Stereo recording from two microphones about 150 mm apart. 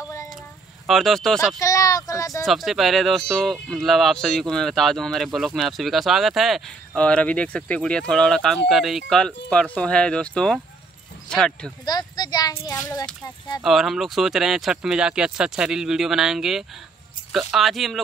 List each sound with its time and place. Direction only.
0.8 s speech: centre (ahead or behind)
1.6 s speech: 20° left (ahead or behind)
2.4 s speech: centre (ahead or behind)
11.8 s a child's voice: 25° left (ahead or behind)
13.6 s speech: centre (ahead or behind)